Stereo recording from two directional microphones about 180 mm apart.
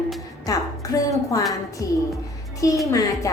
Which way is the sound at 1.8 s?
15° left (ahead or behind).